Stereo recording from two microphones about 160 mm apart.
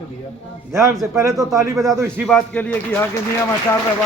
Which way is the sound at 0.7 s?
15° right (ahead or behind).